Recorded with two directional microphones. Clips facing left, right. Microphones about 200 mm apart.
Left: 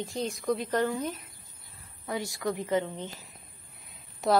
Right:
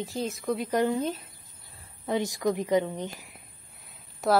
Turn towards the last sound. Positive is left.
turn(degrees=0)  # may be behind; listen again after turning